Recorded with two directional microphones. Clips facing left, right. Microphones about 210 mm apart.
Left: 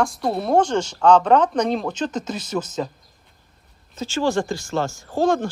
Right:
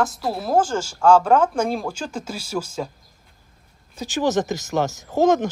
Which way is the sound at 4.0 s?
15° right (ahead or behind).